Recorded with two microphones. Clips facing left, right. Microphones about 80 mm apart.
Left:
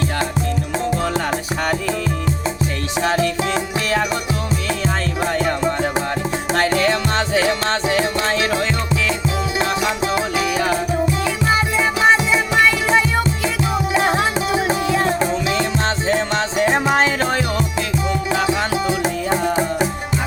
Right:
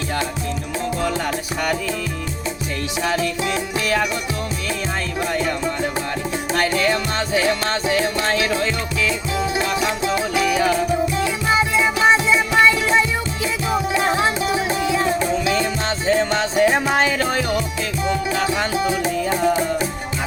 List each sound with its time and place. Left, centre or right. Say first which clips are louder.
3.0 s music: left 3 dB; left
5.2 s music: left 3 dB; left
10.2 s music: even; left
14.5 s music: left 2 dB; left
16.0 s music: right 1 dB; left